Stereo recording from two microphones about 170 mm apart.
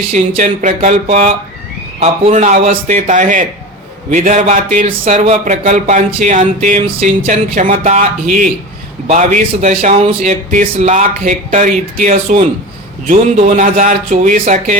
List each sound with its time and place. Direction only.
0.1 s speech: 45° right (ahead or behind)
4.9 s speech: 40° right (ahead or behind)